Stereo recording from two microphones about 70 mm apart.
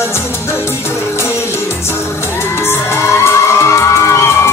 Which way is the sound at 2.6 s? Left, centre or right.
Left.